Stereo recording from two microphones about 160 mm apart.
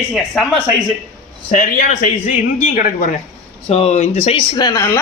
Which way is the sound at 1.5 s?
50° left (ahead or behind).